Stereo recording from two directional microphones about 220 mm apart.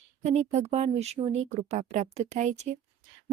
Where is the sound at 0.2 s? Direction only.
30° right (ahead or behind).